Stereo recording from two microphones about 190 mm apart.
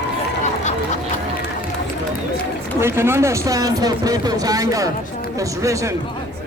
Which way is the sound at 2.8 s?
10° right (ahead or behind).